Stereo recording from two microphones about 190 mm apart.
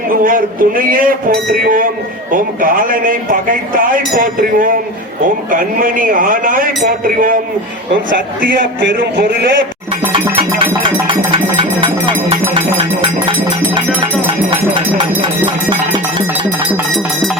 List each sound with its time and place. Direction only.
0.1 s speech: 45° right (ahead or behind)
10.1 s music: 25° right (ahead or behind)
12.5 s a sound: 25° right (ahead or behind)